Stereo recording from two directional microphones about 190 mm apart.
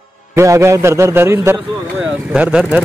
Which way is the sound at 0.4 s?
15° right (ahead or behind).